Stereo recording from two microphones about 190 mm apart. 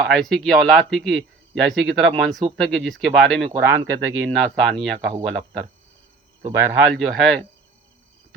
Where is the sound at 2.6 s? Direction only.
5° left (ahead or behind).